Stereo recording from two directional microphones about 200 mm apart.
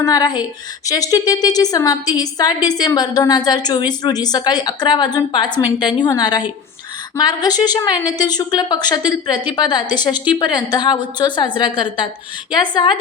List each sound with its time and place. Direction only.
0.0 s a woman's voice: 20° left (ahead or behind)